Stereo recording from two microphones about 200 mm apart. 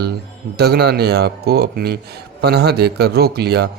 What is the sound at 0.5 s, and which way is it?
A man's voice, 55° right (ahead or behind).